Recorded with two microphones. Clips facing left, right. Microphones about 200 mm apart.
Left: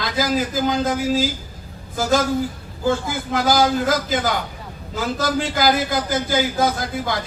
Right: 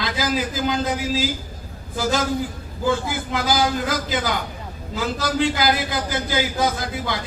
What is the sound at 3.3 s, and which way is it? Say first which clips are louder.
A man's voice: left 4 dB; 45° left (ahead or behind).